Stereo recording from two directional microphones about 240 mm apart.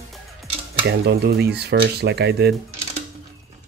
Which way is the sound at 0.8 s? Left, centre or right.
Right.